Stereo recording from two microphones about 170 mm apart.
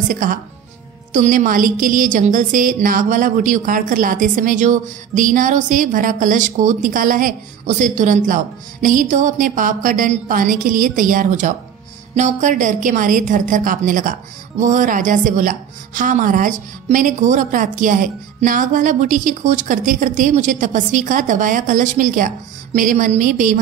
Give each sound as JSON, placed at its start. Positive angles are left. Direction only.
{"t": 0.1, "sound": "a woman's voice", "side_deg": -55}